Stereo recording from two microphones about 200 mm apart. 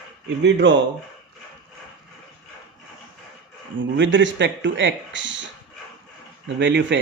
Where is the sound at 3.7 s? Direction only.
65° right (ahead or behind).